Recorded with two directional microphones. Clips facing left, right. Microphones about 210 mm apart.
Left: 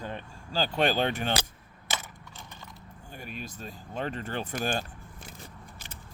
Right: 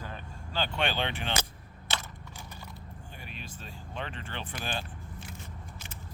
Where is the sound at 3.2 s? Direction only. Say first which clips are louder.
Left 7 dB; 45° left (ahead or behind).